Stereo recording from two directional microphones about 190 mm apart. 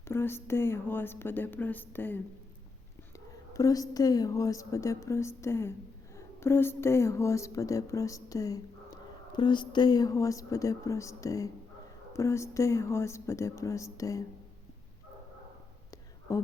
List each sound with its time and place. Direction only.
0.0 s a woman's voice: 10° left (ahead or behind)
3.5 s a woman's voice: 20° left (ahead or behind)
16.3 s speech: 15° left (ahead or behind)